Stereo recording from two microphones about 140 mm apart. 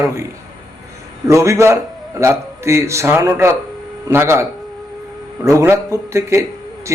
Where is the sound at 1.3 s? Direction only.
20° right (ahead or behind).